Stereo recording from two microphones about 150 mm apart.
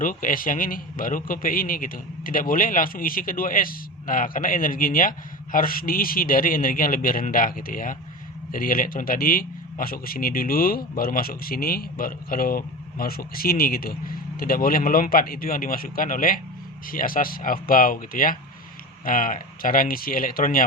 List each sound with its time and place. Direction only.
0.0 s a man's voice: 65° left (ahead or behind)